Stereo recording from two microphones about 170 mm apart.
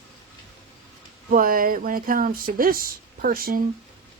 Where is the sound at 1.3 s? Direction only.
55° right (ahead or behind).